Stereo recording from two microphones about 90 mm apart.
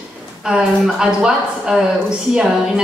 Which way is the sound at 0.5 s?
5° right (ahead or behind).